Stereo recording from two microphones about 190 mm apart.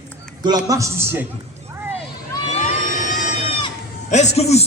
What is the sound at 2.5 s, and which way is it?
Vehicle, 45° left (ahead or behind).